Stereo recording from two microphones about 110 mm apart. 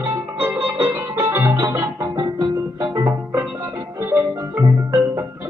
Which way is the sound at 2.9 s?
30° right (ahead or behind).